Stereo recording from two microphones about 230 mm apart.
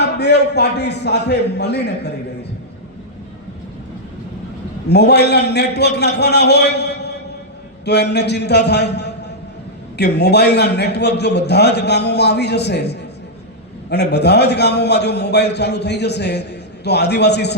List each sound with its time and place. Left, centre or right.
0.0 s a man's voice: left
4.9 s a man's voice: left